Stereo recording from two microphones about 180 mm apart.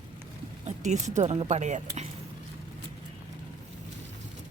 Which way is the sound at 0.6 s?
40° right (ahead or behind).